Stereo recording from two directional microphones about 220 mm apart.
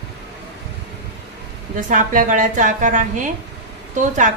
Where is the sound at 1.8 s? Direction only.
35° right (ahead or behind).